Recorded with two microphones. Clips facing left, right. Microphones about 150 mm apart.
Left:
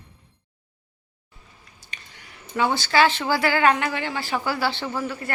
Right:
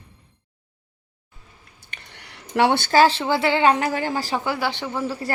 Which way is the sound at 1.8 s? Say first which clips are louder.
Right 2 dB; 60° right (ahead or behind).